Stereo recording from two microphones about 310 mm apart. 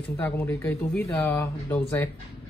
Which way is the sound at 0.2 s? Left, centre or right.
Centre.